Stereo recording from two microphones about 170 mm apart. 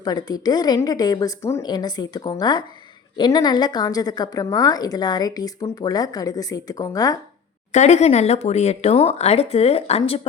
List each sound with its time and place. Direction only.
0.0 s a woman's voice: 25° left (ahead or behind)
7.7 s speech: 40° left (ahead or behind)